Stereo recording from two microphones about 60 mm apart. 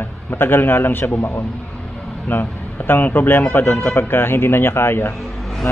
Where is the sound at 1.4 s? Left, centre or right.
Centre.